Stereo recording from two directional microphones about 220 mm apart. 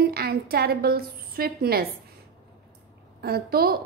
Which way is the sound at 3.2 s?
45° right (ahead or behind).